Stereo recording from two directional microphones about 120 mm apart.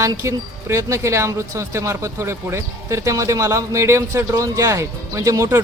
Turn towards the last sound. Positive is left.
turn(degrees=-25)  # may be behind; listen again after turning